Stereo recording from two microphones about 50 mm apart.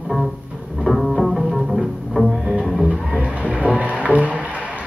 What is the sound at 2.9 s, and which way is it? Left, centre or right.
Music, right.